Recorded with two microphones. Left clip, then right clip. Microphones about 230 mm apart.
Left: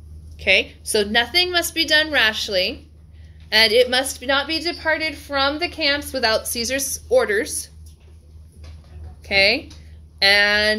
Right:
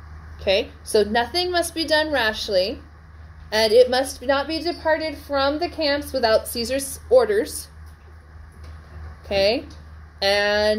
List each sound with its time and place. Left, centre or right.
0.4 s a woman's voice: left
9.2 s a woman's voice: left